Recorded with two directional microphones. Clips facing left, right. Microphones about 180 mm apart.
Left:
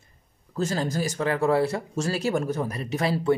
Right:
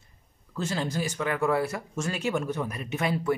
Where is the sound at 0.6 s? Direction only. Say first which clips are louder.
Left 3 dB; 40° left (ahead or behind).